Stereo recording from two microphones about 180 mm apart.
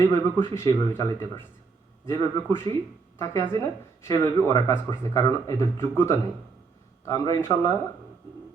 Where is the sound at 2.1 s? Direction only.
15° left (ahead or behind).